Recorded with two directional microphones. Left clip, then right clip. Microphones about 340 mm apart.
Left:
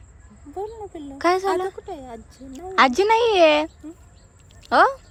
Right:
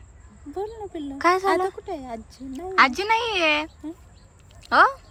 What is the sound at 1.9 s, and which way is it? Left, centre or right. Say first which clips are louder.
Speech: right 2 dB; centre.